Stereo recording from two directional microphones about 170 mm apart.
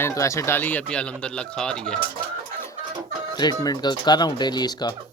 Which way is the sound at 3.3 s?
25° left (ahead or behind).